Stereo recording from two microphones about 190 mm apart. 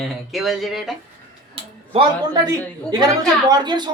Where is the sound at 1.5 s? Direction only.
25° right (ahead or behind).